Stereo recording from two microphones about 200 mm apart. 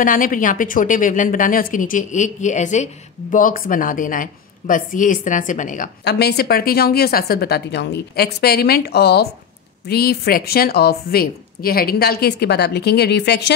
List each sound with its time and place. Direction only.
0.0 s speech: 45° left (ahead or behind)
6.0 s a woman's voice: 55° left (ahead or behind)